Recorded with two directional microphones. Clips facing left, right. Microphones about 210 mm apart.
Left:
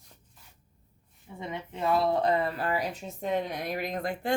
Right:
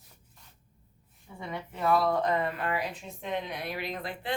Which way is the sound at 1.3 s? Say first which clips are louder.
Left 1 dB; 20° left (ahead or behind).